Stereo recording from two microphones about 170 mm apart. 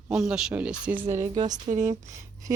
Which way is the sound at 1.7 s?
45° right (ahead or behind).